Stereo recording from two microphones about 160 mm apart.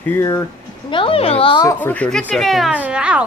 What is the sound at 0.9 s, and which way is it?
Speech, 35° left (ahead or behind).